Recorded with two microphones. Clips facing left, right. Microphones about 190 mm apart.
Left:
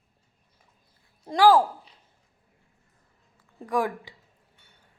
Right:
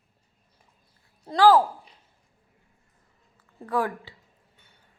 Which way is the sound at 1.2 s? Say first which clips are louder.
Even; 15° left (ahead or behind).